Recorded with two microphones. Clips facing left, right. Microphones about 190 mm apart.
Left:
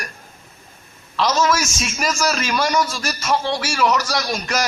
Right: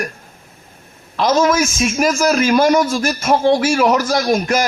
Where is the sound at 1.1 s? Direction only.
50° right (ahead or behind).